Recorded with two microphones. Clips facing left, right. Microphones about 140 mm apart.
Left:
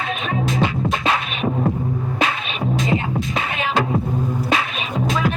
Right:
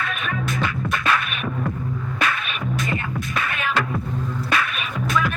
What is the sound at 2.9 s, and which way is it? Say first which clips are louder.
Music: left 5 dB; 25° left (ahead or behind).